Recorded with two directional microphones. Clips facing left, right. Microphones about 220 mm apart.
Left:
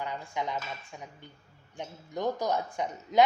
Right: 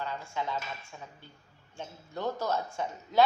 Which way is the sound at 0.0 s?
15° left (ahead or behind).